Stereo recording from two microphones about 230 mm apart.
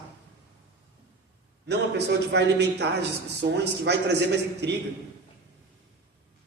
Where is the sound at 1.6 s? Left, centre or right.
Right.